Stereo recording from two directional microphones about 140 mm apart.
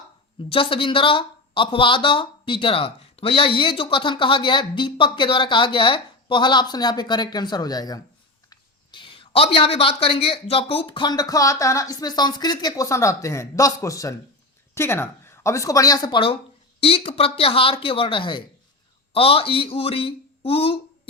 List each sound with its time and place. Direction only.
0.4 s speech: 40° left (ahead or behind)